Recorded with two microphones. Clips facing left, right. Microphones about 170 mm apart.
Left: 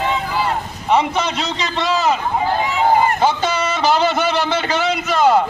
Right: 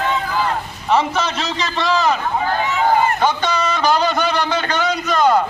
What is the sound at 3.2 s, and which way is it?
Speech, 25° left (ahead or behind).